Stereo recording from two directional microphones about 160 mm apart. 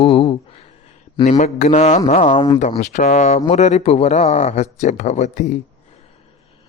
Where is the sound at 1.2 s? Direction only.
50° left (ahead or behind).